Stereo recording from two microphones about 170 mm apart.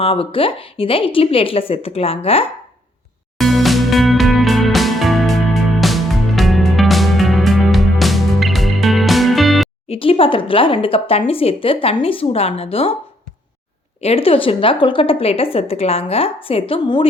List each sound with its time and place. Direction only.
0.0 s a woman's voice: 35° left (ahead or behind)
3.3 s music: centre (ahead or behind)
9.9 s a woman's voice: 35° left (ahead or behind)
14.0 s a woman's voice: 35° left (ahead or behind)